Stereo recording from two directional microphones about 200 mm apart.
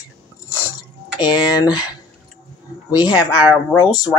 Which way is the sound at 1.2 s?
20° left (ahead or behind).